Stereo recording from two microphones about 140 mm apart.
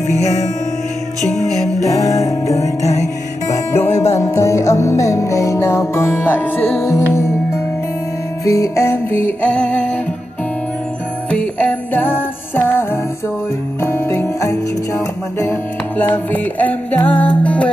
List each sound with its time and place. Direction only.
0.1 s music: 55° left (ahead or behind)
1.3 s music: centre (ahead or behind)
1.9 s music: 25° left (ahead or behind)
11.2 s music: 10° left (ahead or behind)
16.0 s music: 15° left (ahead or behind)